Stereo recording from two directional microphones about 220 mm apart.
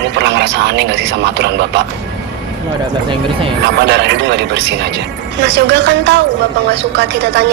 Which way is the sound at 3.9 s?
50° right (ahead or behind).